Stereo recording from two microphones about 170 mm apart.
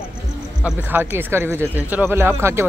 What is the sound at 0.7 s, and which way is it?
Speech, 10° right (ahead or behind).